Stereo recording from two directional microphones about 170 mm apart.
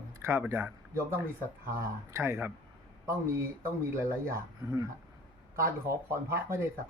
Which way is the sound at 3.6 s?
15° right (ahead or behind).